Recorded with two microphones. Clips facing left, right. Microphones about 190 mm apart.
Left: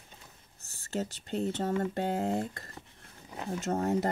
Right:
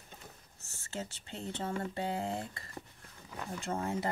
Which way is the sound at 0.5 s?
35° left (ahead or behind).